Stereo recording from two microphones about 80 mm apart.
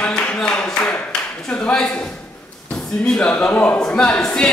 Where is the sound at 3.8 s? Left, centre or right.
Centre.